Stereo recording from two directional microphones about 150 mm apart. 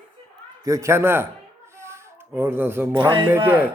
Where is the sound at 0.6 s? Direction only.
20° right (ahead or behind).